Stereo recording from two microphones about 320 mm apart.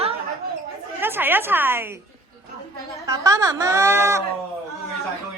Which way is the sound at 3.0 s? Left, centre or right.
Centre.